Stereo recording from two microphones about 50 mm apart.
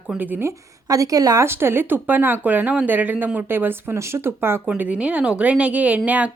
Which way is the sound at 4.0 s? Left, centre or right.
Right.